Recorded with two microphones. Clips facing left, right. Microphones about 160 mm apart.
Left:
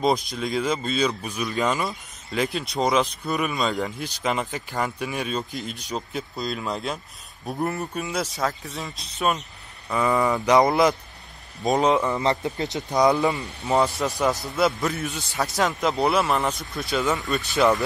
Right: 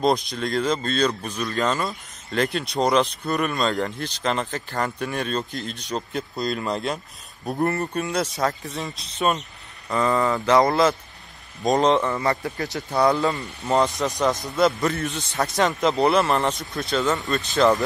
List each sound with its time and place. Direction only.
0.0 s speech: centre (ahead or behind)
11.6 s speech: 5° left (ahead or behind)
12.2 s speech: 20° left (ahead or behind)
13.4 s speech: 5° left (ahead or behind)
13.8 s speech: 15° right (ahead or behind)
14.5 s speech: centre (ahead or behind)